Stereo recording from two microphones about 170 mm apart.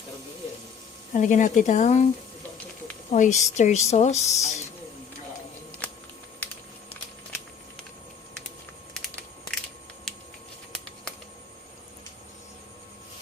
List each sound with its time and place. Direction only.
1.1 s speech: 45° left (ahead or behind)
3.1 s a woman's voice: 45° left (ahead or behind)
8.9 s a sound: 5° left (ahead or behind)